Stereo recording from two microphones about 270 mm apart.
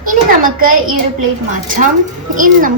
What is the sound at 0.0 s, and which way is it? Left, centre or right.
A woman's voice, right.